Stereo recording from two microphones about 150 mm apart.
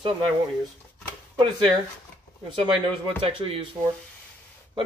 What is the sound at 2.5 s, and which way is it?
Speech, 30° right (ahead or behind).